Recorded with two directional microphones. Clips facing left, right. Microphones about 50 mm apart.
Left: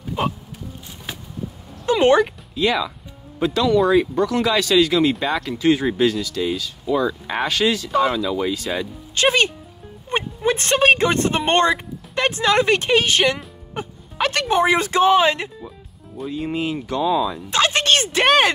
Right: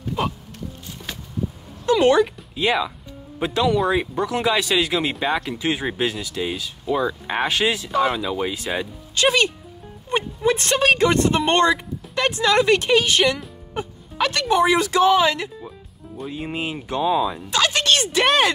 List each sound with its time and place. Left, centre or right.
1.9 s speech: left
2.5 s speech: centre
9.1 s speech: left
16.3 s speech: centre
17.5 s a sound: left